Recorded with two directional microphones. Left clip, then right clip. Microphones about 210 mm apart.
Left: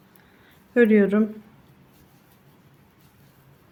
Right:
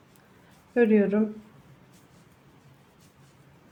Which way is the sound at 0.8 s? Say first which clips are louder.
Left 4 dB; 25° left (ahead or behind).